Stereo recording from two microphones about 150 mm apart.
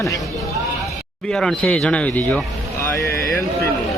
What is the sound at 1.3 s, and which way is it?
Speech, 5° left (ahead or behind).